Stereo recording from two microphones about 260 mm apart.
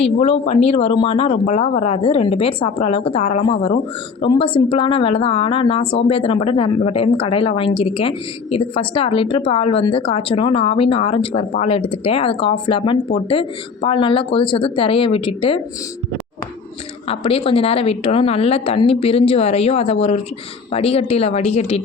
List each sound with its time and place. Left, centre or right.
0.0 s speech: left
5.8 s speech: left
6.1 s speech: left
17.1 s speech: left